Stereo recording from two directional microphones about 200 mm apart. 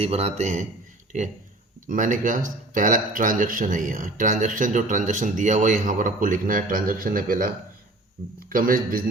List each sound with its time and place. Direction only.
0.0 s speech: 30° right (ahead or behind)
1.9 s a man's voice: 40° right (ahead or behind)